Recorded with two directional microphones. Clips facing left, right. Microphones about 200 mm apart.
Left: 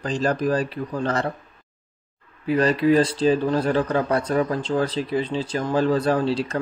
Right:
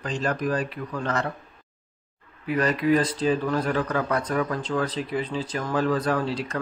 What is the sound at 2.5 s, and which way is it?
Speech, 30° left (ahead or behind).